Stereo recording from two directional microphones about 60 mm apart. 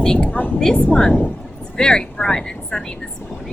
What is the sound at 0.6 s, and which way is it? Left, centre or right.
Speech, centre.